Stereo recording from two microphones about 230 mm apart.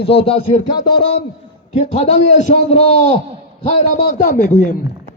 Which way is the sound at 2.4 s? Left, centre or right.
Left.